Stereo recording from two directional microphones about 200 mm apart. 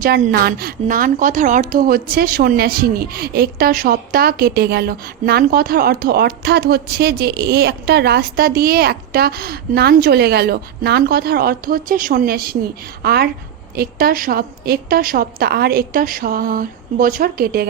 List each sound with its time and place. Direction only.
0.0 s a woman's voice: 50° right (ahead or behind)